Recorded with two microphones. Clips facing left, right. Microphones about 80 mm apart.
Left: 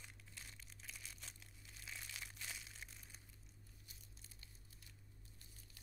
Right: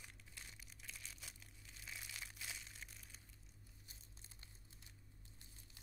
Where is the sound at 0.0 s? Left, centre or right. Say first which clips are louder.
Even; centre.